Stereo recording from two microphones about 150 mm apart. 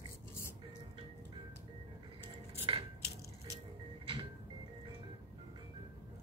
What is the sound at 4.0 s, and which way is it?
Sliding door, 30° right (ahead or behind).